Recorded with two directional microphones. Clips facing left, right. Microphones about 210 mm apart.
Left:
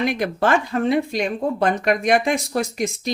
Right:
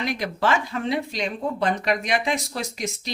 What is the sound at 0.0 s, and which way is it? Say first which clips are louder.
Speech: left 4 dB; 55° left (ahead or behind).